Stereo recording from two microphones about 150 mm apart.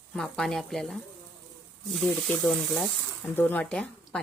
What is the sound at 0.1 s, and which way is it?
Speech, 5° left (ahead or behind).